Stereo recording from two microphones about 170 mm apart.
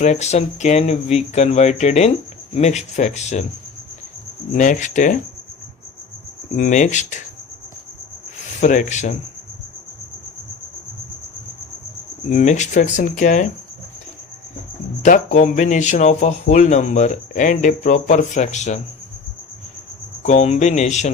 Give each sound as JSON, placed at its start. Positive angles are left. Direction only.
{"t": 0.0, "sound": "speech", "side_deg": 40}
{"t": 4.5, "sound": "speech", "side_deg": 50}
{"t": 6.6, "sound": "speech", "side_deg": 45}
{"t": 8.6, "sound": "speech", "side_deg": 45}
{"t": 12.3, "sound": "speech", "side_deg": 45}
{"t": 15.0, "sound": "speech", "side_deg": 45}
{"t": 20.2, "sound": "speech", "side_deg": 40}